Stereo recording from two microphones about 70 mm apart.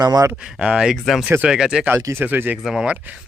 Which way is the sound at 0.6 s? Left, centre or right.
Centre.